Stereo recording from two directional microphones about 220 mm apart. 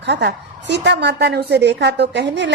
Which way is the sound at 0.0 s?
50° right (ahead or behind).